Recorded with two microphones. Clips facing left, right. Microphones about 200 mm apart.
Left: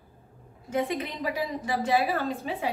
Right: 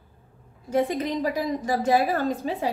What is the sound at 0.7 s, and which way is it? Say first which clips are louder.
A woman's voice: right 5 dB; 35° right (ahead or behind).